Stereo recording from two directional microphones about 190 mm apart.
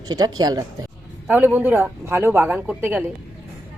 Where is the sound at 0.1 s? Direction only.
20° right (ahead or behind).